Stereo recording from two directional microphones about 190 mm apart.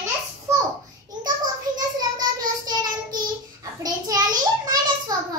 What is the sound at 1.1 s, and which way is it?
Child singing, 20° right (ahead or behind).